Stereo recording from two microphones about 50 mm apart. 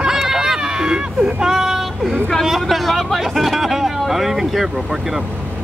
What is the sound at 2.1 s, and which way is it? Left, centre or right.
Speech, centre.